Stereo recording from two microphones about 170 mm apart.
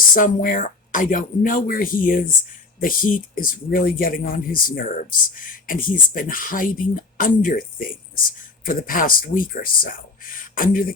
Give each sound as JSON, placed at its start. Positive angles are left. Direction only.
{"t": 0.1, "sound": "speech", "side_deg": 55}